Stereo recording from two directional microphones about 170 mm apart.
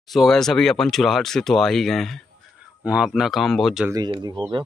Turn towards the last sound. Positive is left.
turn(degrees=-25)  # may be behind; listen again after turning